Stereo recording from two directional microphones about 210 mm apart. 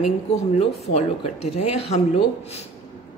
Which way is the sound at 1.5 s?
30° left (ahead or behind).